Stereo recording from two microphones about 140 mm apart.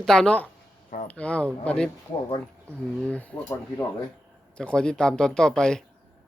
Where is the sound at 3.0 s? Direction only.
10° left (ahead or behind).